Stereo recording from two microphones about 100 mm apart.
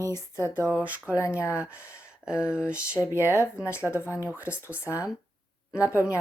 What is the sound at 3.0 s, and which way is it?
Speech, 30° left (ahead or behind).